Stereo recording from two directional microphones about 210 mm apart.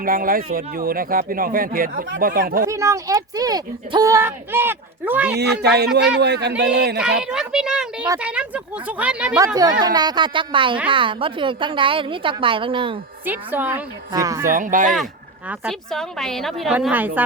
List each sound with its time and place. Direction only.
0.0 s speech: 40° right (ahead or behind)
2.6 s speech: 15° right (ahead or behind)
5.4 s speech: 50° right (ahead or behind)
7.0 s a woman's voice: 5° right (ahead or behind)
8.0 s a woman's voice: 15° right (ahead or behind)
9.8 s a woman's voice: 20° right (ahead or behind)
13.2 s speech: 10° right (ahead or behind)
14.4 s speech: 40° right (ahead or behind)
15.4 s a woman's voice: centre (ahead or behind)